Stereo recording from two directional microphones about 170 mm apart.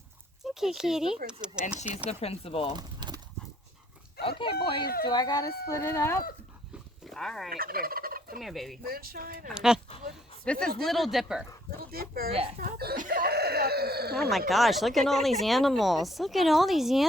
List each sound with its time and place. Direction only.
0.4 s speech: centre (ahead or behind)
2.0 s speech: 35° left (ahead or behind)
2.7 s horse: 25° right (ahead or behind)
4.2 s speech: 30° left (ahead or behind); by 6.2 s 15° left (ahead or behind)
7.0 s speech: 5° left (ahead or behind)
7.5 s fowl: 60° right (ahead or behind)
8.4 s speech: centre (ahead or behind)
8.9 s speech: 60° right (ahead or behind)
9.5 s speech: 5° right (ahead or behind)
10.4 s speech: 5° left (ahead or behind)
11.8 s speech: 60° right (ahead or behind)
14.3 s speech: centre (ahead or behind)